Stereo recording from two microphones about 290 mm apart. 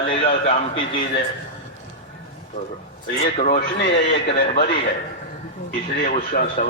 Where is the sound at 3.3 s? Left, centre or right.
Left.